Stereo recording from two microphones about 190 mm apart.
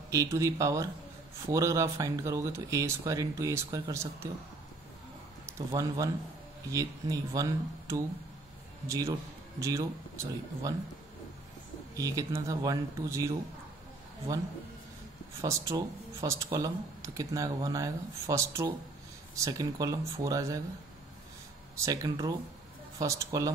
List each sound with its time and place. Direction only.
0.1 s speech: 15° right (ahead or behind)
5.7 s a man's voice: 20° right (ahead or behind)
12.0 s speech: 15° right (ahead or behind)
15.4 s speech: 15° right (ahead or behind)
21.8 s speech: 20° right (ahead or behind)